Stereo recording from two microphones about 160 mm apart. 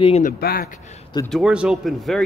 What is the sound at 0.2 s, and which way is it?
Speech, 70° left (ahead or behind).